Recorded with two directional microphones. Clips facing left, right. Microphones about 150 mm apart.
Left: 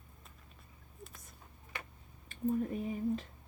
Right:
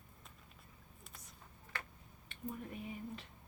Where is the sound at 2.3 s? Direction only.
40° left (ahead or behind).